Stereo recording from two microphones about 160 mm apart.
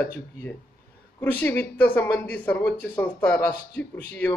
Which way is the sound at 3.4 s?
90° left.